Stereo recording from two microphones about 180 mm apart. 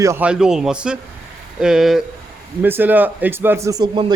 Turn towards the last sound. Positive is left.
turn(degrees=-25)  # may be behind; listen again after turning